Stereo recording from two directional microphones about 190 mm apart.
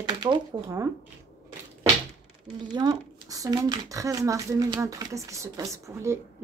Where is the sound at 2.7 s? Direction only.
20° right (ahead or behind).